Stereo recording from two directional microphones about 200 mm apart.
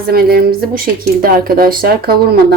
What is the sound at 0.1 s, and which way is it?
Speech, 50° right (ahead or behind).